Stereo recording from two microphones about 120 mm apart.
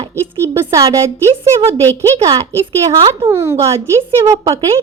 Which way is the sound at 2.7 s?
55° right (ahead or behind).